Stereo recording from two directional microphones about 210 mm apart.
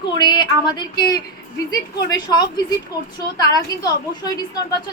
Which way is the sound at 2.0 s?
20° left (ahead or behind).